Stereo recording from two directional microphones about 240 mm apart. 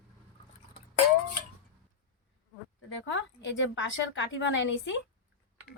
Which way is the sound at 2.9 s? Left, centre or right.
Left.